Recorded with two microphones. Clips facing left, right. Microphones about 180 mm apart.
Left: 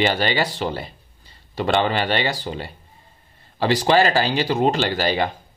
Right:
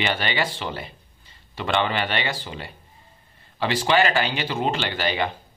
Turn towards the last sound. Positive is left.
turn(degrees=35)  # may be behind; listen again after turning